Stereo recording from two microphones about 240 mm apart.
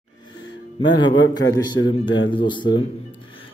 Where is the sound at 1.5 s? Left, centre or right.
Centre.